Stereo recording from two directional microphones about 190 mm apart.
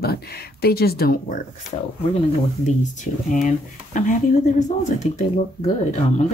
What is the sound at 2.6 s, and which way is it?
Speech, 40° left (ahead or behind).